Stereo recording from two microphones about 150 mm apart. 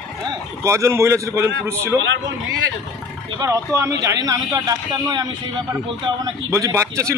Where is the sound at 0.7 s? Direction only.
20° right (ahead or behind).